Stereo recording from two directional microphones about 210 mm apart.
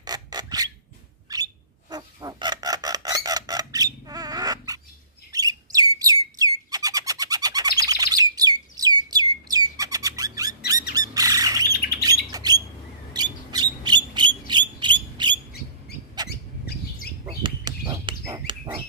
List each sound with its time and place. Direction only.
0.0 s filing: 20° right (ahead or behind)
1.3 s chicken: 15° right (ahead or behind)
5.3 s bird: 15° right (ahead or behind)
11.0 s squawk: 15° right (ahead or behind)
11.7 s squawk: 45° left (ahead or behind)
12.0 s bird: 20° right (ahead or behind)
17.3 s bird: 20° right (ahead or behind)